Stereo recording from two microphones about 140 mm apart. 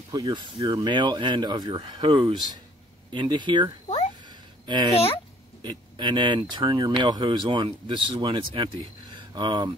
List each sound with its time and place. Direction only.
0.1 s speech: 30° right (ahead or behind)
4.3 s a sound: 35° right (ahead or behind)
5.6 s speech: 30° right (ahead or behind)